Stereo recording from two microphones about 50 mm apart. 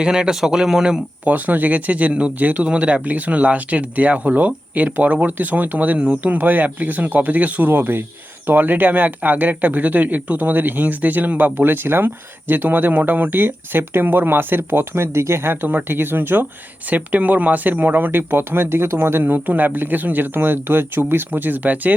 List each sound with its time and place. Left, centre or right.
0.0 s speech: centre
1.2 s speech: right
7.7 s speech: right
15.6 s speech: right
16.9 s speech: right
19.2 s speech: right